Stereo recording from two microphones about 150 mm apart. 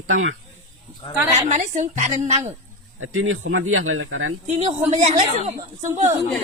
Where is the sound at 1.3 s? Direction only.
55° right (ahead or behind).